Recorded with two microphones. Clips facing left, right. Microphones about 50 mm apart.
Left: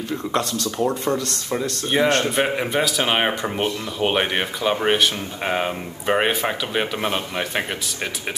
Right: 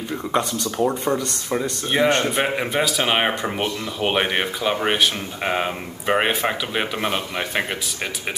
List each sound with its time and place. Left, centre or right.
0.1 s speech: centre
1.5 s speech: centre
2.0 s speech: centre
2.3 s speech: centre